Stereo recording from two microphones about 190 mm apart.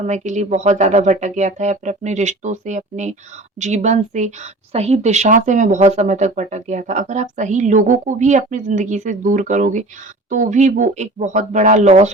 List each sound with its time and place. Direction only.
0.0 s speech: 40° right (ahead or behind)